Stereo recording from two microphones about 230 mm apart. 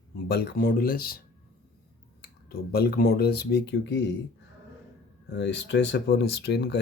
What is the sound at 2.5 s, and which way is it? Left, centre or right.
Speech, left.